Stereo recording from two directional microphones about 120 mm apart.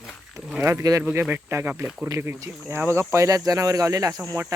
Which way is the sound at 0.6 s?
25° right (ahead or behind).